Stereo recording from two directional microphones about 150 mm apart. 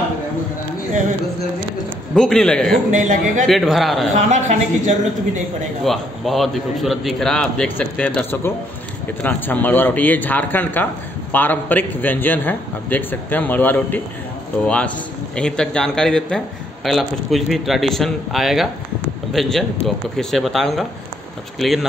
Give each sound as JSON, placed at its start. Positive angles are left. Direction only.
{"t": 2.1, "sound": "a man's voice", "side_deg": 5}
{"t": 2.9, "sound": "a woman's voice", "side_deg": -60}
{"t": 3.4, "sound": "a man's voice", "side_deg": 0}
{"t": 4.1, "sound": "a woman's voice", "side_deg": -55}
{"t": 5.9, "sound": "a man's voice", "side_deg": 0}
{"t": 15.3, "sound": "a man's voice", "side_deg": 5}